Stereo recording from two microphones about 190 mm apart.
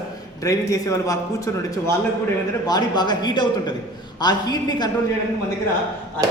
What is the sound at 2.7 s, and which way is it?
Speech, 20° left (ahead or behind).